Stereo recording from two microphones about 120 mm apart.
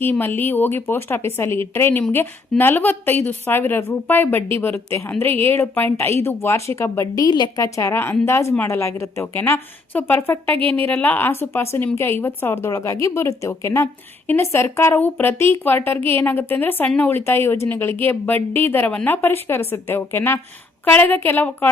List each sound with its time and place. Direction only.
0.0 s a woman's voice: 15° left (ahead or behind)
7.3 s a woman's voice: 35° left (ahead or behind); by 21.7 s 15° left (ahead or behind)